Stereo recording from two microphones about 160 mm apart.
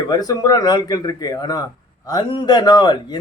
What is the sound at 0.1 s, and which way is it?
Speech, 25° left (ahead or behind).